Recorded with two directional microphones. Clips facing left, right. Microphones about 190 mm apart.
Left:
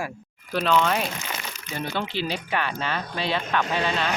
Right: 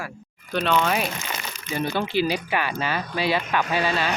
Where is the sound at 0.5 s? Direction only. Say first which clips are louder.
Even; centre (ahead or behind).